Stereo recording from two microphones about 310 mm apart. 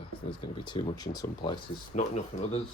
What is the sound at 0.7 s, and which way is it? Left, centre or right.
Speech, centre.